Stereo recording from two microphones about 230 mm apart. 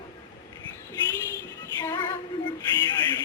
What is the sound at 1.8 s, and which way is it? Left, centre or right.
Female singing, centre.